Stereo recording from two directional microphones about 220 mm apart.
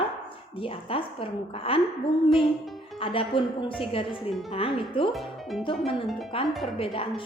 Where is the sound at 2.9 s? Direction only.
25° left (ahead or behind).